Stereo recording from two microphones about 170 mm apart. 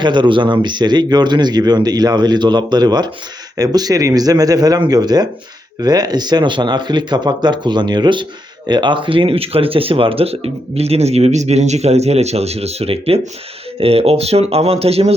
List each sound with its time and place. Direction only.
0.0 s speech: 25° right (ahead or behind)